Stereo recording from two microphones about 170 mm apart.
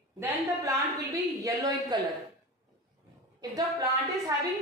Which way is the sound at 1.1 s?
20° right (ahead or behind).